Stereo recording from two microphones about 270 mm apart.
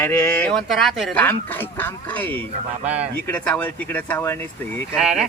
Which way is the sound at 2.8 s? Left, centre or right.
Centre.